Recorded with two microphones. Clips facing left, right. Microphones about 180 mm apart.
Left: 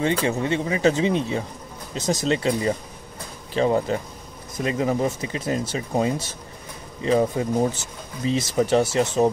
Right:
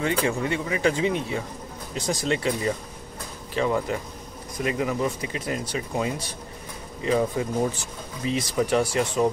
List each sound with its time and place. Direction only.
0.0 s speech: 25° left (ahead or behind)